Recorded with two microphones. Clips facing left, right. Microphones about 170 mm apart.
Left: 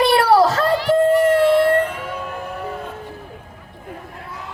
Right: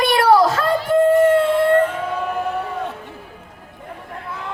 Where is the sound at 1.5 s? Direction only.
75° left (ahead or behind).